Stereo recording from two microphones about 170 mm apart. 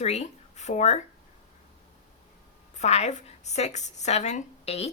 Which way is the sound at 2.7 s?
40° left (ahead or behind).